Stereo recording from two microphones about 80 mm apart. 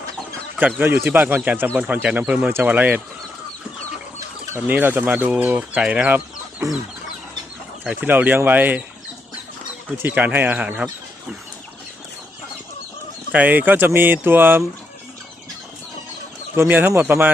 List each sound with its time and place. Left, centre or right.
0.8 s speech: right
4.5 s speech: right
6.6 s chicken: right
8.0 s speech: right
10.0 s speech: right
13.3 s speech: centre
16.6 s speech: right